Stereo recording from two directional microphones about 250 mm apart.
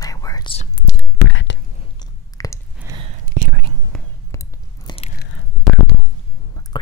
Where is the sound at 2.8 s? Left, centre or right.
Centre.